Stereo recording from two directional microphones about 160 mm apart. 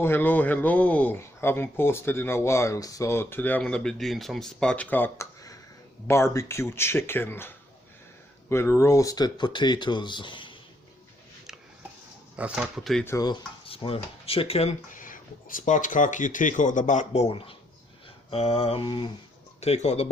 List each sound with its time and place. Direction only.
0.0 s speech: 15° left (ahead or behind); by 10.5 s 30° left (ahead or behind)
12.4 s speech: 5° right (ahead or behind)
13.1 s speech: 25° left (ahead or behind); by 14.9 s 40° left (ahead or behind)
14.9 s speech: 55° left (ahead or behind); by 19.1 s 30° left (ahead or behind)
19.5 s a man's voice: 40° left (ahead or behind)